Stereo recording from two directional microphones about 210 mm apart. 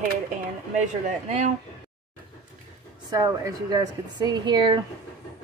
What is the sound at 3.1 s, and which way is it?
A woman's voice, 15° right (ahead or behind).